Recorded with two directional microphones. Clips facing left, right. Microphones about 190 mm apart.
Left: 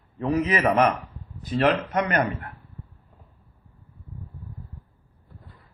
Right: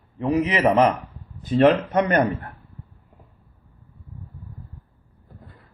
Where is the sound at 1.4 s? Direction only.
30° right (ahead or behind).